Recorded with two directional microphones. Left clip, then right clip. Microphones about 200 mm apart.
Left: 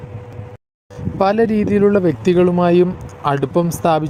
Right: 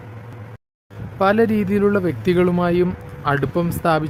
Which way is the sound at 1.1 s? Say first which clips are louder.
Left 2 dB; 25° left (ahead or behind).